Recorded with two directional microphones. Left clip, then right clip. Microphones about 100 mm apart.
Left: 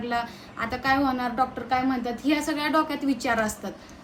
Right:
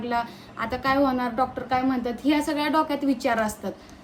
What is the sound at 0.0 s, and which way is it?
A woman's voice, 40° right (ahead or behind).